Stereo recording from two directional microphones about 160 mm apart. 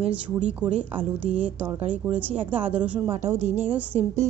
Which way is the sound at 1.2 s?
40° right (ahead or behind).